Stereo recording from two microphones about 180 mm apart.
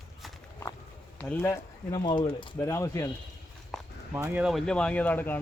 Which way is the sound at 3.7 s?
Centre (ahead or behind).